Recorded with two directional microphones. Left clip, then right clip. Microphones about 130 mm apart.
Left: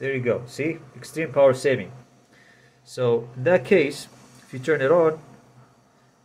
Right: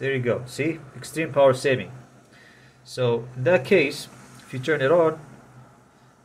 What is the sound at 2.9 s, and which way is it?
Speech, 25° left (ahead or behind).